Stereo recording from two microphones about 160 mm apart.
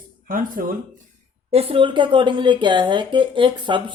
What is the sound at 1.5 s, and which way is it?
Speech, 35° right (ahead or behind).